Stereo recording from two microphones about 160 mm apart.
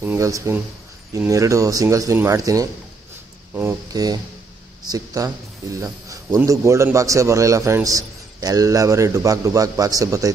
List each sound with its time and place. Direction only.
0.0 s speech: 15° right (ahead or behind)